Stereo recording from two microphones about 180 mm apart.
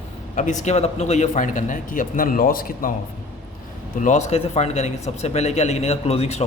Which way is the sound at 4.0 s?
40° left (ahead or behind).